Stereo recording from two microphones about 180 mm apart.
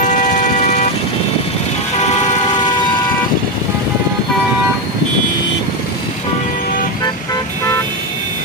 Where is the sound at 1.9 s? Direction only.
40° left (ahead or behind).